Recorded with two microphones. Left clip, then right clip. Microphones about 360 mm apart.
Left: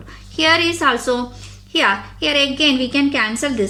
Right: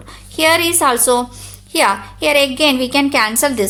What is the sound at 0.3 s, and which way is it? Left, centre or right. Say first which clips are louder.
A woman's voice: right 2 dB; centre.